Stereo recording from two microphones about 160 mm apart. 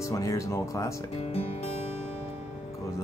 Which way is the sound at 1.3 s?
40° left (ahead or behind).